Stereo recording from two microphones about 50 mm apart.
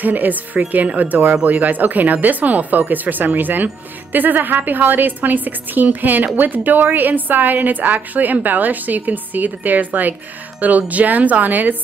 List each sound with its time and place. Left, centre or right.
0.0 s a woman's voice: right